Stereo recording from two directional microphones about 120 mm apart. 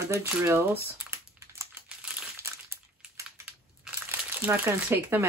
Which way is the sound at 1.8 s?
10° right (ahead or behind).